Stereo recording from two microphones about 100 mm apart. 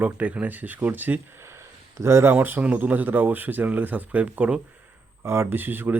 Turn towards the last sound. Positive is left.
turn(degrees=-20)  # may be behind; listen again after turning